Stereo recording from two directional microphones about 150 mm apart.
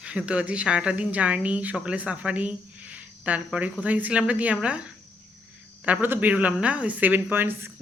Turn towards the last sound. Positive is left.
turn(degrees=-15)  # may be behind; listen again after turning